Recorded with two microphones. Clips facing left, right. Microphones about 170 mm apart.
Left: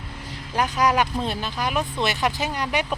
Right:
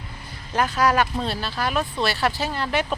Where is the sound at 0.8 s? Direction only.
15° left (ahead or behind).